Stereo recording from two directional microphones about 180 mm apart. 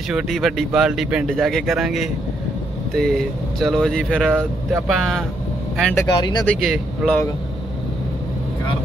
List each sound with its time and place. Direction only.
0.1 s speech: centre (ahead or behind)
6.1 s speech: 25° left (ahead or behind)
6.6 s speech: centre (ahead or behind)